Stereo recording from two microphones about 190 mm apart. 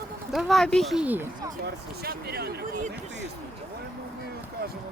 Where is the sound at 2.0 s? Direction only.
55° right (ahead or behind).